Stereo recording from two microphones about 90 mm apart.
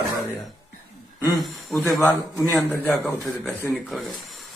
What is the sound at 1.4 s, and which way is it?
Speech, centre (ahead or behind).